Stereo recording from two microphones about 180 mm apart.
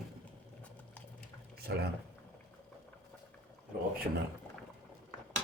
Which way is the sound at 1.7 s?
70° right (ahead or behind).